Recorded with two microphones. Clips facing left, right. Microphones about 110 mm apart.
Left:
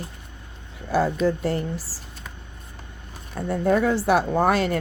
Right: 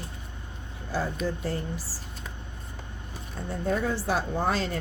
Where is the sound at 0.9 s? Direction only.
75° left (ahead or behind).